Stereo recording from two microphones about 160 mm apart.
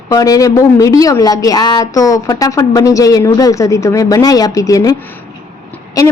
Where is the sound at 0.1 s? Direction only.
20° left (ahead or behind).